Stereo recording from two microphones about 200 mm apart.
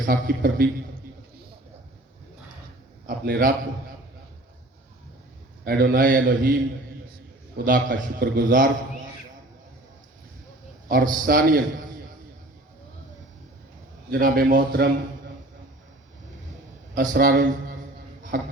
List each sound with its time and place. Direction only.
0.0 s a man's voice: 45° right (ahead or behind)
3.1 s a man's voice: 45° right (ahead or behind)
5.6 s a man's voice: 45° right (ahead or behind)
7.5 s a man's voice: 45° right (ahead or behind)
10.8 s a man's voice: 45° right (ahead or behind)
14.1 s a man's voice: 45° right (ahead or behind)
16.9 s a man's voice: 40° right (ahead or behind)